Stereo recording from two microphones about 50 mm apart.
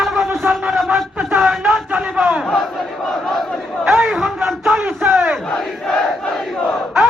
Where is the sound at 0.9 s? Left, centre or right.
Right.